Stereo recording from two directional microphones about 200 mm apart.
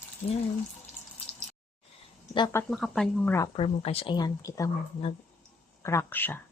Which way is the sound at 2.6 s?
Centre (ahead or behind).